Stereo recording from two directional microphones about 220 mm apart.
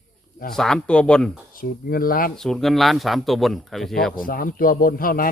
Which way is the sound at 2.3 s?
Centre (ahead or behind).